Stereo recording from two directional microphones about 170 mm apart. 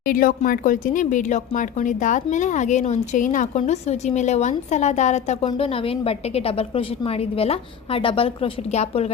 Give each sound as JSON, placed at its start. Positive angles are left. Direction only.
{"t": 0.1, "sound": "a woman's voice", "side_deg": 55}